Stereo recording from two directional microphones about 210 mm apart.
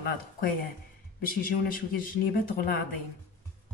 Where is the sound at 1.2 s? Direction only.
40° left (ahead or behind).